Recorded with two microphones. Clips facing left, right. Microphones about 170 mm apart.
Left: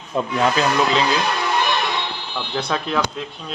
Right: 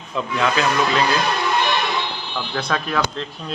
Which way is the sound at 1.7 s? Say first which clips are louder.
Even; centre (ahead or behind).